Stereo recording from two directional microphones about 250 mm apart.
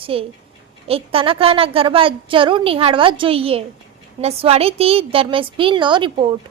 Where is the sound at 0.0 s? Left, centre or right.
Right.